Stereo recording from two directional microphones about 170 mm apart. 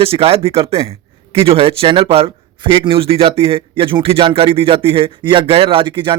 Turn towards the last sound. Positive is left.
turn(degrees=-30)  # may be behind; listen again after turning